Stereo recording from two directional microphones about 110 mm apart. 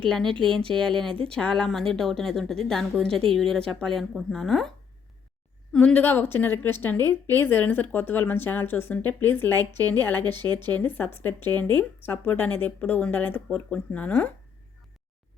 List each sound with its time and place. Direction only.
0.0 s a woman's voice: 5° left (ahead or behind)
5.7 s a woman's voice: 10° left (ahead or behind)